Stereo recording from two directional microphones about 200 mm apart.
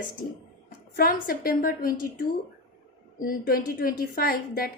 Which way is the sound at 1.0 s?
45° left (ahead or behind).